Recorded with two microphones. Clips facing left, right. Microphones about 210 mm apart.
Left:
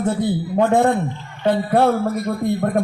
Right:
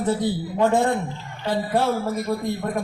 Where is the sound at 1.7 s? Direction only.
60° left (ahead or behind).